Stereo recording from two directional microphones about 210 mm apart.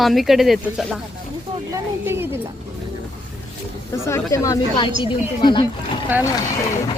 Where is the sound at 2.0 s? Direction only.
10° right (ahead or behind).